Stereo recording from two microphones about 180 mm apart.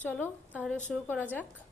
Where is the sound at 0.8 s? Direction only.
10° left (ahead or behind).